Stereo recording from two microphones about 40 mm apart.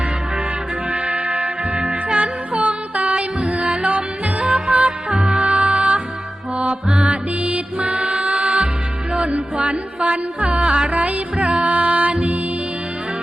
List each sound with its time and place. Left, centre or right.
0.9 s music: right
2.1 s music: right